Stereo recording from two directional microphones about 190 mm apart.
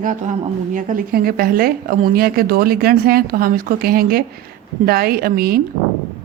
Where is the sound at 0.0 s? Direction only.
45° right (ahead or behind).